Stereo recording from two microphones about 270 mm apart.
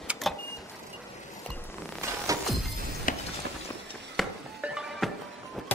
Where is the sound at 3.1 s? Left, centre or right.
Left.